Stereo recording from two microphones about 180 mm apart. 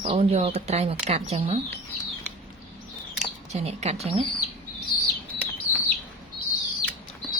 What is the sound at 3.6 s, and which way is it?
Speech, 35° right (ahead or behind).